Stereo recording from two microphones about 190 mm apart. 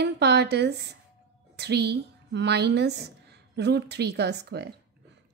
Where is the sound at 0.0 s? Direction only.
60° right (ahead or behind).